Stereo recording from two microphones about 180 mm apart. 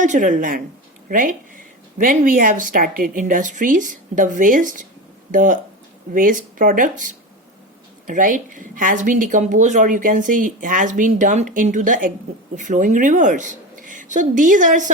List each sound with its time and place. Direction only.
0.0 s a woman's voice: 45° right (ahead or behind)